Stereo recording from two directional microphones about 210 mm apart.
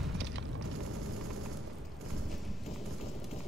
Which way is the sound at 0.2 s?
60° right (ahead or behind).